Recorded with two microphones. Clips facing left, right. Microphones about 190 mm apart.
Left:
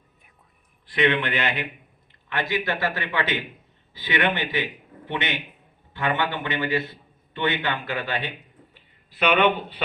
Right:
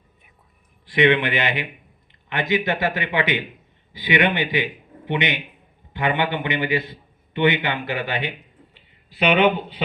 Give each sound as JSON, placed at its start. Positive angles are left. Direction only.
{"t": 0.9, "sound": "a man's voice", "side_deg": -15}